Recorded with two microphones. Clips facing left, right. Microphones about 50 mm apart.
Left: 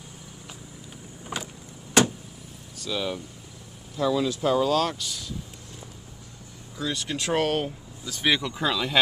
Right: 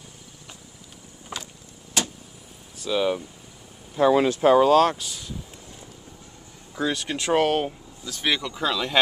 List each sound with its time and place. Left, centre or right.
1.3 s vehicle: centre
2.8 s speech: centre
3.9 s speech: right
4.9 s speech: centre
6.8 s speech: right
7.2 s speech: centre
8.0 s speech: centre